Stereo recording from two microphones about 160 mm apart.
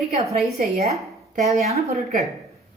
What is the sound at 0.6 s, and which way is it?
Speech, 40° right (ahead or behind).